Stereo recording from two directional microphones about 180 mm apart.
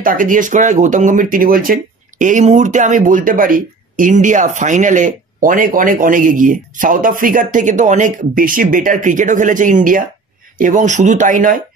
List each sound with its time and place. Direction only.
0.0 s speech: 50° right (ahead or behind)